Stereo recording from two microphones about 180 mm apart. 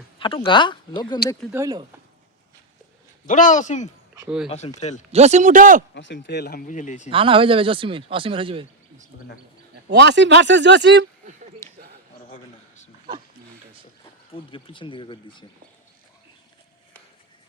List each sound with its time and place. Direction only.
0.2 s speech: 30° left (ahead or behind)
1.5 s speech: 20° right (ahead or behind)
3.2 s speech: 45° left (ahead or behind)
5.1 s speech: 40° right (ahead or behind)
5.9 s speech: 90° left
6.2 s speech: 70° left (ahead or behind)
6.7 s speech: 45° left (ahead or behind)
7.1 s speech: 30° right (ahead or behind)
9.9 s speech: 75° right (ahead or behind)
11.6 s a sound: 15° left (ahead or behind)
12.3 s a sound: 40° left (ahead or behind)
14.3 s speech: 30° left (ahead or behind)